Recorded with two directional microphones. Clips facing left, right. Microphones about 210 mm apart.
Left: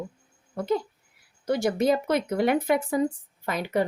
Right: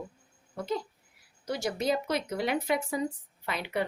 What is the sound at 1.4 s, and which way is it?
Speech, 55° left (ahead or behind).